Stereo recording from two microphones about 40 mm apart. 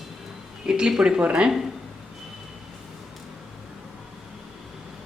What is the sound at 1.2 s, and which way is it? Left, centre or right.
Speech, right.